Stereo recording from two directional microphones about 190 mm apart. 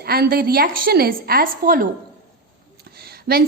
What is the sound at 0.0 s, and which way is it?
A woman's voice, 55° right (ahead or behind).